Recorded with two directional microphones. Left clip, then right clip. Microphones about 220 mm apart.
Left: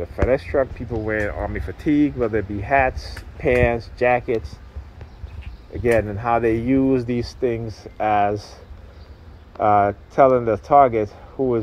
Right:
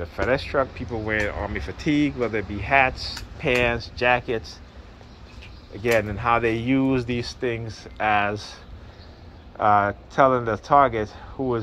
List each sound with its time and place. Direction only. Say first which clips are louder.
0.0 s speech: left 3 dB; 35° left (ahead or behind)
1.1 s speech: even; 25° left (ahead or behind)
1.9 s speech: left 4 dB; 90° left
2.1 s speech: left 4 dB; 30° left (ahead or behind)
5.8 s speech: left 3 dB; 30° left (ahead or behind)
9.6 s speech: left 2 dB; 40° left (ahead or behind)